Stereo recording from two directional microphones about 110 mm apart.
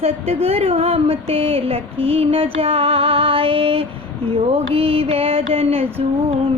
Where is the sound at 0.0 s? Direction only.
65° right (ahead or behind).